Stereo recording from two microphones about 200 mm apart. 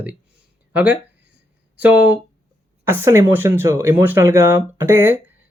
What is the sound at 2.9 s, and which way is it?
Speech, 10° right (ahead or behind).